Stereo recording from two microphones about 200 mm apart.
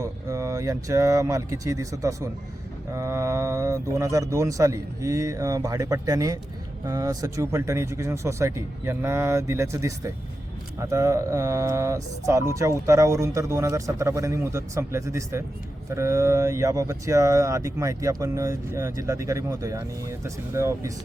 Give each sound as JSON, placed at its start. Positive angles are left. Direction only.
{"t": 0.0, "sound": "speech", "side_deg": -15}